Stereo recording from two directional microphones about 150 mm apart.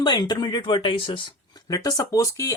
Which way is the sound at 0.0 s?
25° left (ahead or behind).